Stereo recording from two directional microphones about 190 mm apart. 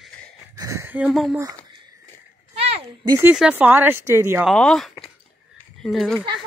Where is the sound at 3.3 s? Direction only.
5° right (ahead or behind).